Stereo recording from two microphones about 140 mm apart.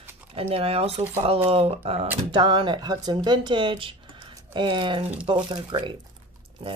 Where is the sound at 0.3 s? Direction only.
45° right (ahead or behind).